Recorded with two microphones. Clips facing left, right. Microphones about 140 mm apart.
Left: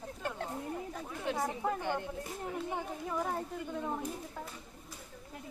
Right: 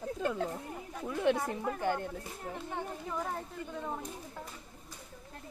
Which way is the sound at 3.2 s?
5° left (ahead or behind).